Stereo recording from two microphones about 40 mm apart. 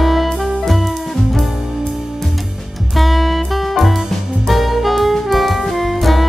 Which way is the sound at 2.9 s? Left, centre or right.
Centre.